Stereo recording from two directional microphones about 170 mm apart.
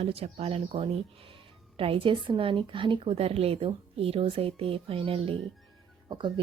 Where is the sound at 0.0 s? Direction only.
35° right (ahead or behind).